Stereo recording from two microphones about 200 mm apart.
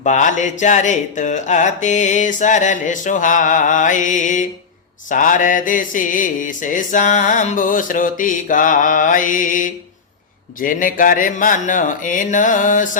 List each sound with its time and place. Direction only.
0.0 s mantra: 40° left (ahead or behind)